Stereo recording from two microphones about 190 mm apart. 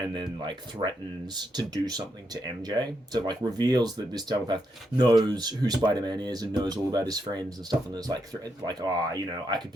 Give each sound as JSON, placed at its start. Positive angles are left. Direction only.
{"t": 0.4, "sound": "speech", "side_deg": -25}